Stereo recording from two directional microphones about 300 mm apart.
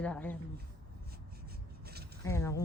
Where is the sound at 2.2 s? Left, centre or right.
Centre.